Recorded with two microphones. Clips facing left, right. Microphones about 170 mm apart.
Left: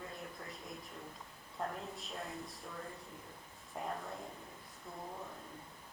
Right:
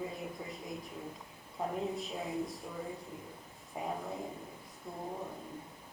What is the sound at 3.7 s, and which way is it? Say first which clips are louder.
Speech: right 3 dB; 5° right (ahead or behind).